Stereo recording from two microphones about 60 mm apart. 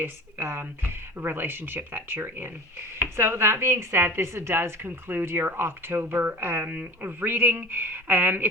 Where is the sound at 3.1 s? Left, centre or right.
Right.